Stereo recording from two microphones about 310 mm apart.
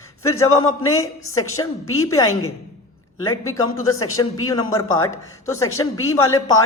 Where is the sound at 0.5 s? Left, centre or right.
Left.